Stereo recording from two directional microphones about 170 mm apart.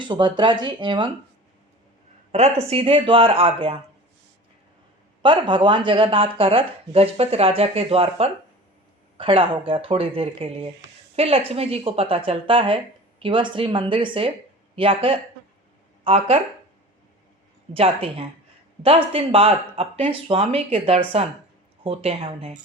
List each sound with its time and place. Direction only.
0.0 s speech: 30° right (ahead or behind)
2.3 s speech: 40° right (ahead or behind)
5.2 s speech: 30° right (ahead or behind)
17.7 s speech: 35° right (ahead or behind)